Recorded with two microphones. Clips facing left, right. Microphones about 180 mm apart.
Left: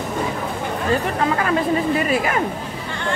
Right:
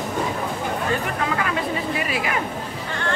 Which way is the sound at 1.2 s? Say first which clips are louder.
Left 5 dB; 40° left (ahead or behind).